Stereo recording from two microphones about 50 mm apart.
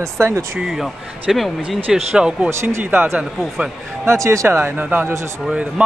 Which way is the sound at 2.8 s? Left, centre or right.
Right.